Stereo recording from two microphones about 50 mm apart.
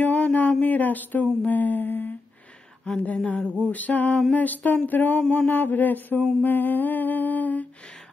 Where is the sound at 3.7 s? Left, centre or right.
Left.